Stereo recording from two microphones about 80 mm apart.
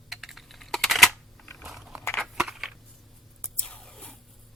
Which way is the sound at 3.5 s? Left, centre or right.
Centre.